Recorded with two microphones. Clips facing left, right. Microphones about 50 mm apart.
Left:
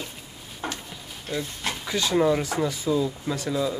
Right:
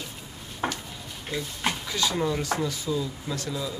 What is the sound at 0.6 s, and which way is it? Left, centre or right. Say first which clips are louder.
Speech: right 3 dB; right.